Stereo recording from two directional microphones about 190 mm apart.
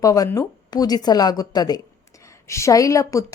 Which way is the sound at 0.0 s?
20° left (ahead or behind).